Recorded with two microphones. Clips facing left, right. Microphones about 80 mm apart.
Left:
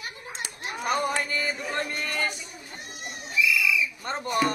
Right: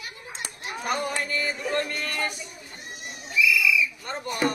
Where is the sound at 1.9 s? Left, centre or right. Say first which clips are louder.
Even; centre.